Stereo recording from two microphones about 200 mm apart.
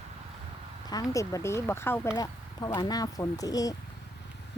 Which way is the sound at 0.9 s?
15° left (ahead or behind).